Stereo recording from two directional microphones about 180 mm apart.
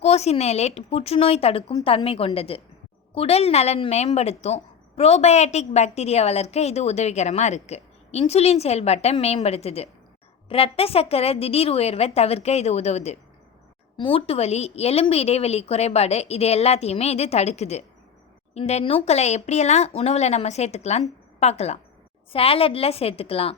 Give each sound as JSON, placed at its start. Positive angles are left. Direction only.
{"t": 0.0, "sound": "a woman's voice", "side_deg": 35}